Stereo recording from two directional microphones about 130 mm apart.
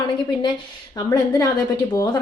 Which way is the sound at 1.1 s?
25° left (ahead or behind).